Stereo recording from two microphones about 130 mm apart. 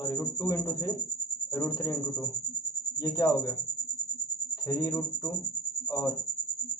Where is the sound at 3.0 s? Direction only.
25° left (ahead or behind).